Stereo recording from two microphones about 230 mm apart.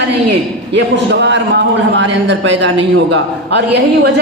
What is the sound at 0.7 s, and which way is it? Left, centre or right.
A woman's voice, right.